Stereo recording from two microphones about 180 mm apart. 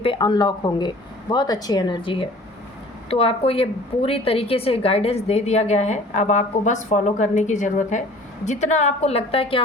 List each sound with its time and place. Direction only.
0.0 s a woman's voice: 25° left (ahead or behind)